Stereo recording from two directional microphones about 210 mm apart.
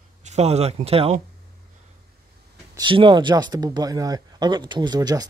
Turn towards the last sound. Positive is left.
turn(degrees=-20)  # may be behind; listen again after turning